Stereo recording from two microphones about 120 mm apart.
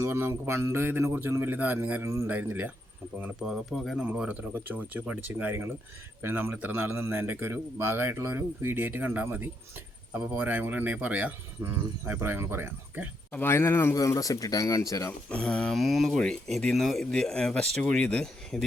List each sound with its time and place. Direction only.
0.0 s a man's voice: 20° right (ahead or behind)
3.4 s speech: centre (ahead or behind)
4.0 s a man's voice: 10° right (ahead or behind)
13.3 s speech: 20° left (ahead or behind)
15.3 s speech: 10° left (ahead or behind)